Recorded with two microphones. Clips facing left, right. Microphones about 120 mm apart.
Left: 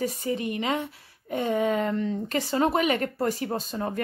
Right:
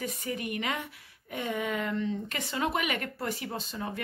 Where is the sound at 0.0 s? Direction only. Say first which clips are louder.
Left 7 dB; 30° left (ahead or behind).